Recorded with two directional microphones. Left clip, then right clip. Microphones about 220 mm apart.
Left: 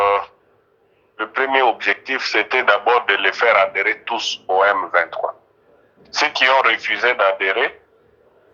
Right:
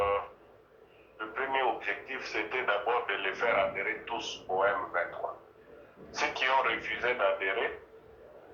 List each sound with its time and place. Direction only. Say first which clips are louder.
1.1 s a man's voice: left 14 dB; 50° left (ahead or behind)